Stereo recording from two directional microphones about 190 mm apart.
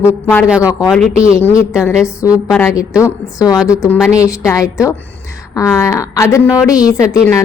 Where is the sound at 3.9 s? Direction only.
5° right (ahead or behind).